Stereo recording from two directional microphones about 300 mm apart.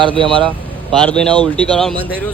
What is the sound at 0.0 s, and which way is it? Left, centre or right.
Speech, centre.